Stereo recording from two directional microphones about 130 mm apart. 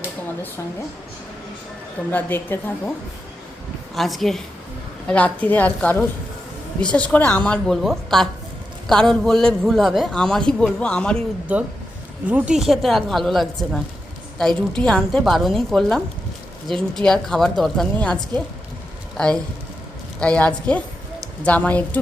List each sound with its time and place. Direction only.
2.0 s a woman's voice: 15° left (ahead or behind)
3.9 s a man's voice: centre (ahead or behind)
12.3 s a man's voice: 5° right (ahead or behind); by 21.8 s 10° left (ahead or behind)